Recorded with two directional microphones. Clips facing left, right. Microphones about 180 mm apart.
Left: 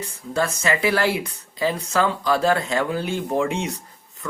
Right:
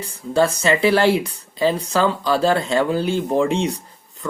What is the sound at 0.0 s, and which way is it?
Speech, 30° right (ahead or behind).